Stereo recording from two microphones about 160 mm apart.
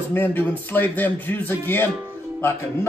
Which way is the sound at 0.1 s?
10° left (ahead or behind).